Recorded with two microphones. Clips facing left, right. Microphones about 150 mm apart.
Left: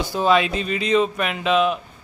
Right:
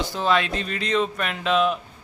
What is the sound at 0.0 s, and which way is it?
Speech, 10° left (ahead or behind).